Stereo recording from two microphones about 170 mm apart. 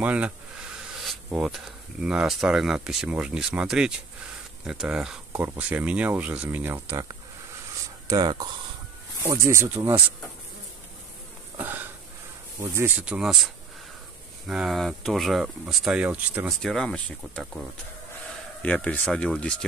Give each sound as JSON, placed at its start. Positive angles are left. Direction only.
{"t": 0.0, "sound": "speech", "side_deg": -10}
{"t": 1.4, "sound": "speech", "side_deg": 0}
{"t": 8.1, "sound": "speech", "side_deg": -25}
{"t": 11.5, "sound": "a sound", "side_deg": -10}
{"t": 12.5, "sound": "speech", "side_deg": -15}
{"t": 14.5, "sound": "speech", "side_deg": 0}
{"t": 16.6, "sound": "speech", "side_deg": 5}
{"t": 18.6, "sound": "speech", "side_deg": 5}